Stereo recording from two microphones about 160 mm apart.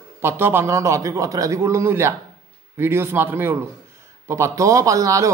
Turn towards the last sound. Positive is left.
turn(degrees=-20)  # may be behind; listen again after turning